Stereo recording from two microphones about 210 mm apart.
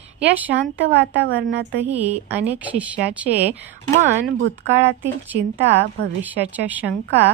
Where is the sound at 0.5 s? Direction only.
55° right (ahead or behind).